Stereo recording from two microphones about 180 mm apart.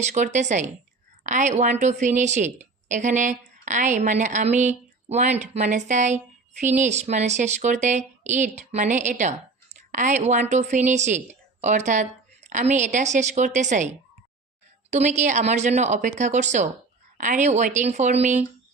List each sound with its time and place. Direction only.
0.0 s a woman's voice: 40° right (ahead or behind)